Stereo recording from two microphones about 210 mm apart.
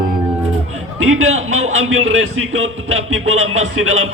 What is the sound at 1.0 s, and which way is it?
A man's voice, 80° right.